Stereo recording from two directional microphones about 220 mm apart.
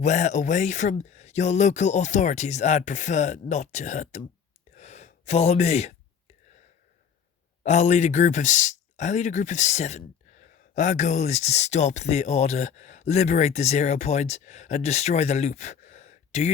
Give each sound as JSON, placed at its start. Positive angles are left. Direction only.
{"t": 0.0, "sound": "speech", "side_deg": 35}
{"t": 4.7, "sound": "gasp", "side_deg": 30}
{"t": 7.6, "sound": "speech", "side_deg": 30}